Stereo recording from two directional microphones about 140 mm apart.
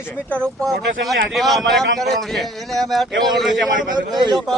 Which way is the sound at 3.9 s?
30° right (ahead or behind).